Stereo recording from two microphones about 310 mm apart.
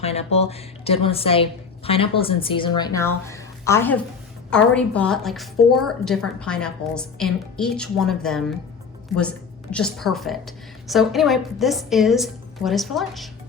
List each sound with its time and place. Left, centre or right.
0.0 s a woman's voice: centre
9.7 s a woman's voice: centre